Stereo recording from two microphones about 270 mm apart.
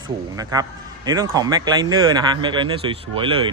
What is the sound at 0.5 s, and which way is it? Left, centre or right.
A man's voice, centre.